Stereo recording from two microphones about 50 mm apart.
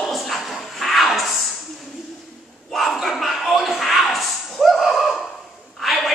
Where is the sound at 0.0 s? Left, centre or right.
Centre.